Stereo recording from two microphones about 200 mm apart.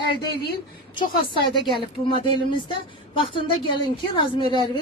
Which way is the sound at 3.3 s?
25° left (ahead or behind).